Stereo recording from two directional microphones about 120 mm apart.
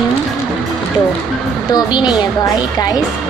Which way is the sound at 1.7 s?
35° left (ahead or behind).